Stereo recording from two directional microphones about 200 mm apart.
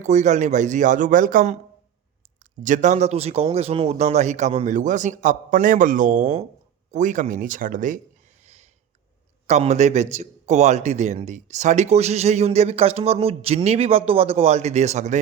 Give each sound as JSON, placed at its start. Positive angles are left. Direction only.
{"t": 0.0, "sound": "a man's voice", "side_deg": -35}
{"t": 8.4, "sound": "a sound", "side_deg": -35}
{"t": 9.5, "sound": "a man's voice", "side_deg": -35}